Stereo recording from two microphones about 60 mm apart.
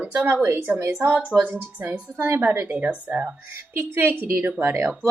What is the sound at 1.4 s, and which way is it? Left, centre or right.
Speech, right.